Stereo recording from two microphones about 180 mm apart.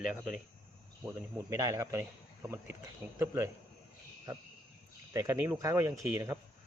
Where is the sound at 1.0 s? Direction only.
15° right (ahead or behind).